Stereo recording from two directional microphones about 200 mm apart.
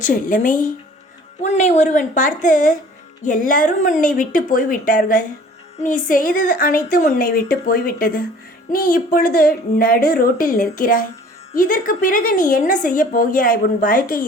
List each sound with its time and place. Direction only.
0.0 s a woman's voice: 40° left (ahead or behind)